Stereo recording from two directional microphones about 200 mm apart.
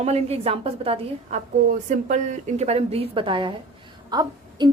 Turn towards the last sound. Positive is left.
turn(degrees=-20)  # may be behind; listen again after turning